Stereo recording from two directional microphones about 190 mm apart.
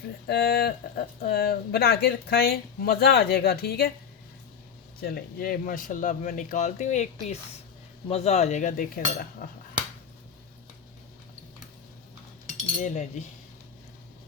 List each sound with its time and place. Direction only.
0.3 s speech: 55° left (ahead or behind)
4.9 s speech: 55° left (ahead or behind)
8.1 s cutlery: 35° left (ahead or behind)
12.8 s cutlery: 35° left (ahead or behind)